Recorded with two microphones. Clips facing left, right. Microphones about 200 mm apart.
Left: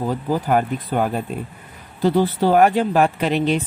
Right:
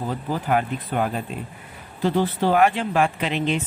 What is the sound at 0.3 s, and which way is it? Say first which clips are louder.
Speech: left 3 dB; 40° left (ahead or behind).